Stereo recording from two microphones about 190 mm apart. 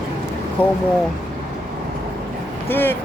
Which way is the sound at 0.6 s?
10° left (ahead or behind).